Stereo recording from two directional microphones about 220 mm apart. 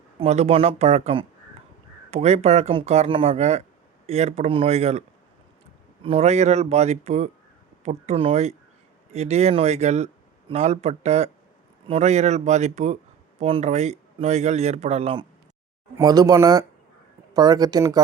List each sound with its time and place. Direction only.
0.2 s a man's voice: 30° right (ahead or behind)